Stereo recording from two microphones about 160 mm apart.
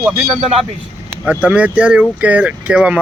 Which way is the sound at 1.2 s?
10° right (ahead or behind).